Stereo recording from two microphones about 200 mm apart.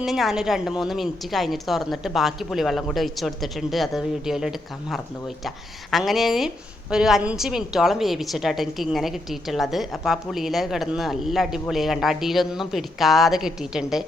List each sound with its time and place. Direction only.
0.0 s a woman's voice: centre (ahead or behind)